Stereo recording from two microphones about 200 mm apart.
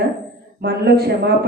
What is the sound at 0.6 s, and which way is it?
Speech, 55° right (ahead or behind).